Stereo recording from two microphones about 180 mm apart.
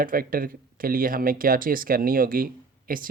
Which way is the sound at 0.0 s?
50° right (ahead or behind).